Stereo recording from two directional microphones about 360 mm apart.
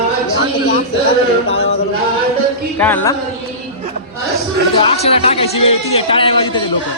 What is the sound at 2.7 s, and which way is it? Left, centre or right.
Speech, centre.